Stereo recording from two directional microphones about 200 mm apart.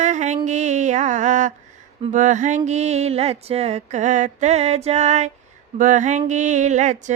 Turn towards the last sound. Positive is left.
turn(degrees=-35)  # may be behind; listen again after turning